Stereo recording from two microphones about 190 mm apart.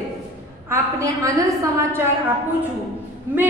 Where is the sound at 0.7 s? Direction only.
15° right (ahead or behind).